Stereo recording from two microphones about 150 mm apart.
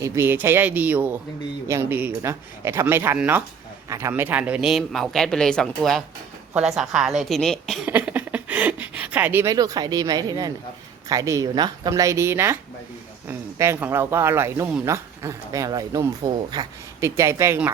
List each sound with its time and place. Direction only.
0.0 s speech: 15° right (ahead or behind); by 7.8 s 5° left (ahead or behind)
7.9 s a sound: 10° right (ahead or behind)
11.1 s speech: 20° right (ahead or behind)